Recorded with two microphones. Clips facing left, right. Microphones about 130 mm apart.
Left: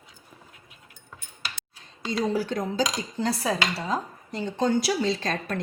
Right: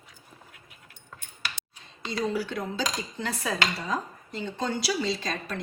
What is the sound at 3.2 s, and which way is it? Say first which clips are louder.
Dishes: left 4 dB; 35° left (ahead or behind).